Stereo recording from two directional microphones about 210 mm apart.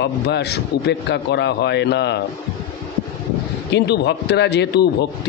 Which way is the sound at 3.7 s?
55° left (ahead or behind).